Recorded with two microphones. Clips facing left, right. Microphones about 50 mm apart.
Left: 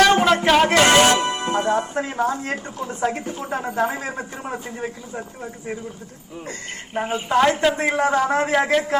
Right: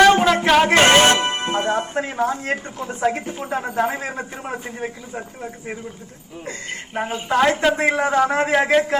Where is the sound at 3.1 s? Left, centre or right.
Centre.